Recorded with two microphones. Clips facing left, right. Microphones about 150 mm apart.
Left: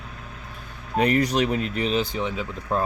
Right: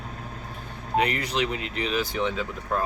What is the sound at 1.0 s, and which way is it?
Speech, 40° left (ahead or behind).